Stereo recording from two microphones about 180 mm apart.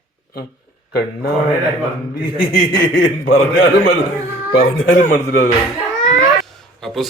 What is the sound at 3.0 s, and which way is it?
Speech, 90° left.